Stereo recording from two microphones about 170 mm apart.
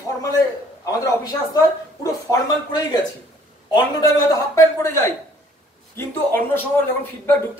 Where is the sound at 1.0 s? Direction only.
20° left (ahead or behind).